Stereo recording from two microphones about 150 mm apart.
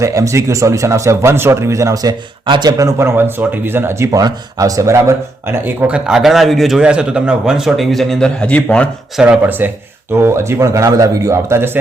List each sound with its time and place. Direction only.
0.0 s speech: 20° right (ahead or behind); by 9.2 s 5° left (ahead or behind)
9.2 s speech: 10° right (ahead or behind)